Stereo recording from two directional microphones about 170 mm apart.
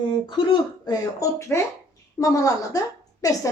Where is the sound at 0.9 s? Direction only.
20° left (ahead or behind).